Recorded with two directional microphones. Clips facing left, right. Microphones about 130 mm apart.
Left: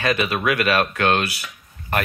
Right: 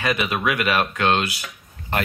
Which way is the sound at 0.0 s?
15° right (ahead or behind).